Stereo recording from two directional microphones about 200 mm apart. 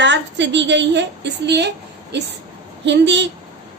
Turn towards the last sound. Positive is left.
turn(degrees=-60)  # may be behind; listen again after turning